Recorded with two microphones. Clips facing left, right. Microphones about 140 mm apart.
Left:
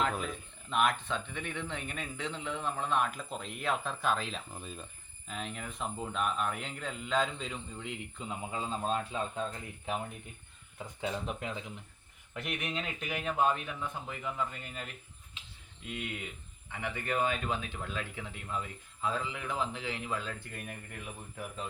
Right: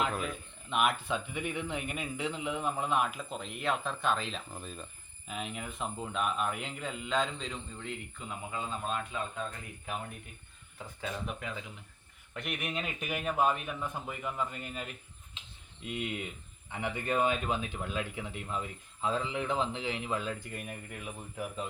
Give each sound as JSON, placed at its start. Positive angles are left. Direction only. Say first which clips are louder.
{"t": 0.0, "sound": "speech", "louder": "even", "side_deg": 0}
{"t": 12.3, "sound": "speech", "louder": "even", "side_deg": 0}
{"t": 12.6, "sound": "speech", "louder": "right 1 dB", "side_deg": -15}
{"t": 15.9, "sound": "a man's voice", "louder": "right 3 dB", "side_deg": -20}